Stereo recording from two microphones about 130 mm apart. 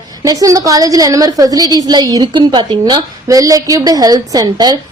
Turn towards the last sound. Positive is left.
turn(degrees=-30)  # may be behind; listen again after turning